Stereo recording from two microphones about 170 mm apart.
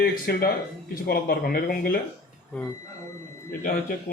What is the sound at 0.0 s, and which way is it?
Speech, 60° left (ahead or behind).